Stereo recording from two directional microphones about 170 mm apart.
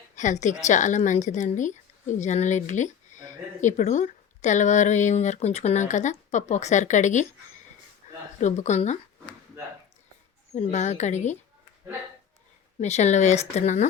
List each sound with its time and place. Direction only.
0.2 s speech: 45° left (ahead or behind)
8.0 s a sound: 45° left (ahead or behind)
8.4 s speech: 45° left (ahead or behind)
10.5 s speech: 40° left (ahead or behind)
12.8 s speech: 40° left (ahead or behind)